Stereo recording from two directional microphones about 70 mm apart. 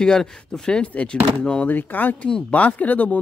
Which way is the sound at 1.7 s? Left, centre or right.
Left.